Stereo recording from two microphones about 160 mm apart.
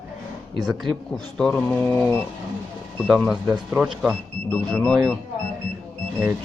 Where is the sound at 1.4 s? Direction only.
10° left (ahead or behind).